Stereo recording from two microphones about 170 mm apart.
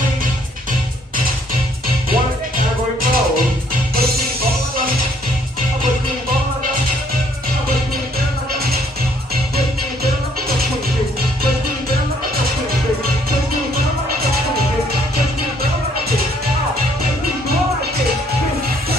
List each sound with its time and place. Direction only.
2.0 s music: 55° right (ahead or behind)